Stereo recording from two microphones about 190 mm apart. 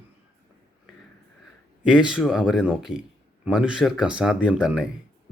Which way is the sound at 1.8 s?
5° right (ahead or behind).